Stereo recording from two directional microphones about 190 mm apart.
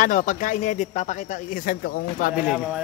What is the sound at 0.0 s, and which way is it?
Speech, 40° left (ahead or behind).